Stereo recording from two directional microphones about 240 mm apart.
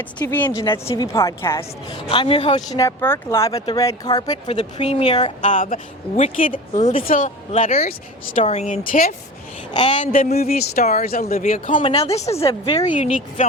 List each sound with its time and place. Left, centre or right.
0.0 s speech: centre
2.0 s speech: left
11.8 s speech: left
13.0 s speech: left